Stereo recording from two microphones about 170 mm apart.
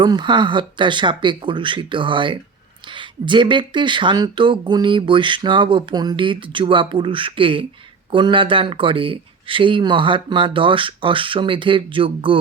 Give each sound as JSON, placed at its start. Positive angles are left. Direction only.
{"t": 0.0, "sound": "speech", "side_deg": -25}